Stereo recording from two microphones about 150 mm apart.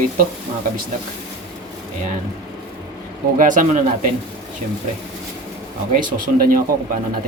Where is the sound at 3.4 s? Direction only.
60° right (ahead or behind).